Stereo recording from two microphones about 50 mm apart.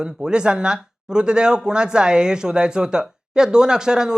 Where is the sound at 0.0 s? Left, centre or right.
Centre.